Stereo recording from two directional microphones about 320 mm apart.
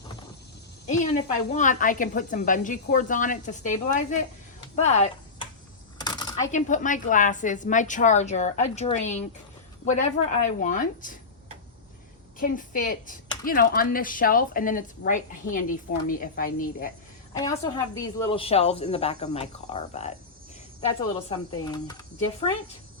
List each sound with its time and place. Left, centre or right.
0.9 s a sound: left
1.5 s speech: left
12.4 s speech: left
17.3 s speech: centre
21.2 s speech: centre